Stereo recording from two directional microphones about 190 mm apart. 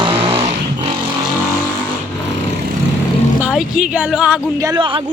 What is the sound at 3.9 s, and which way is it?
Speech, 5° right (ahead or behind).